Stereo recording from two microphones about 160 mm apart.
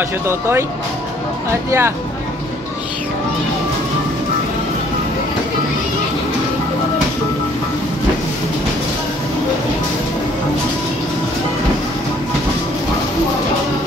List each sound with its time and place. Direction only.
0.3 s speech: 15° right (ahead or behind)
1.7 s speech: 15° right (ahead or behind)